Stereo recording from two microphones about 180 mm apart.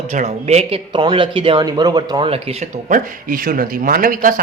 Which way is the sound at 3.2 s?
50° right (ahead or behind).